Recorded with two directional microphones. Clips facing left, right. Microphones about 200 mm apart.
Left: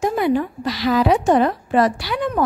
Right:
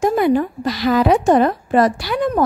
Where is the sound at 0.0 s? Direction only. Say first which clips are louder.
Right 3 dB; 45° right (ahead or behind).